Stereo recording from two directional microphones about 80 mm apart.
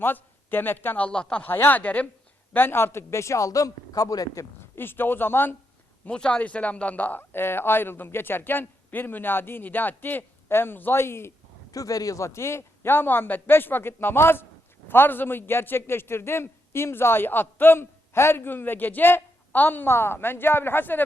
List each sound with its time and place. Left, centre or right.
0.0 s speech: left
1.0 s speech: centre
1.5 s a man's voice: left
4.7 s a man's voice: left
6.1 s a man's voice: centre; by 11.3 s left
11.7 s a man's voice: left